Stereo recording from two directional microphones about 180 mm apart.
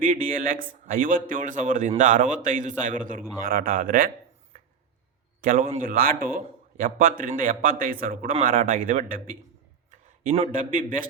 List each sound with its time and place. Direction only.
0.0 s a man's voice: 50° right (ahead or behind)
5.4 s a man's voice: 50° right (ahead or behind)
10.2 s a man's voice: 40° right (ahead or behind)